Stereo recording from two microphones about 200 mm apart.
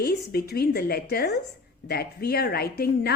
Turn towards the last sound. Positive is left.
turn(degrees=50)  # may be behind; listen again after turning